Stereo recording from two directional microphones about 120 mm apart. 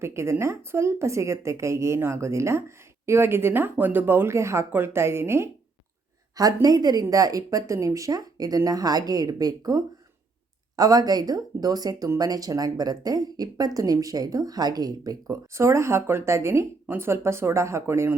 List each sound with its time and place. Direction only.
0.0 s speech: 25° right (ahead or behind)